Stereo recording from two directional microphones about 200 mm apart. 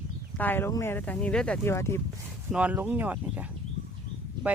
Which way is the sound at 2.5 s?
5° right (ahead or behind).